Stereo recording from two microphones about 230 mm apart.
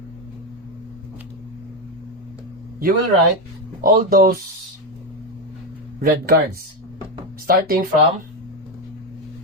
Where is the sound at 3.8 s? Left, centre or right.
Right.